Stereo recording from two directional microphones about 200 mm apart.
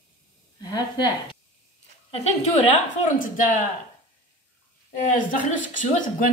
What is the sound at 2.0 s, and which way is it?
A woman's voice, 30° left (ahead or behind).